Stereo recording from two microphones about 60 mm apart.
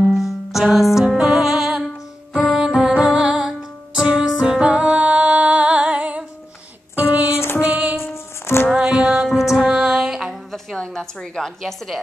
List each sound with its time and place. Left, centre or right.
0.0 s music: centre; by 7.3 s right
7.3 s music: left
7.6 s music: right
8.0 s music: left
8.7 s music: centre
10.5 s a sound: centre